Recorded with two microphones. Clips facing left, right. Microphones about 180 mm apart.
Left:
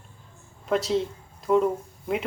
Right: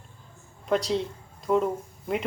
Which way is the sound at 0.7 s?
Centre (ahead or behind).